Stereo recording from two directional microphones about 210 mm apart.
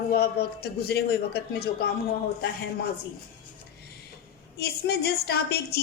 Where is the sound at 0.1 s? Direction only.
50° left (ahead or behind).